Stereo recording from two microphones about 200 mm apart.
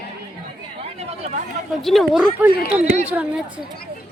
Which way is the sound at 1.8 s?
Centre (ahead or behind).